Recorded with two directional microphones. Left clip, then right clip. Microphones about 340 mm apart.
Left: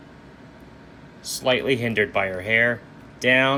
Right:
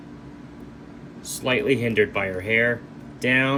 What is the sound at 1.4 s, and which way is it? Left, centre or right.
Speech, centre.